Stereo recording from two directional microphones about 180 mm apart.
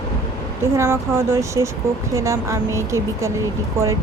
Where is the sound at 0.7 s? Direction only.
15° right (ahead or behind).